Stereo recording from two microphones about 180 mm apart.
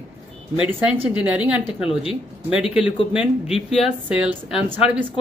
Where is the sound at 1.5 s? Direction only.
30° left (ahead or behind).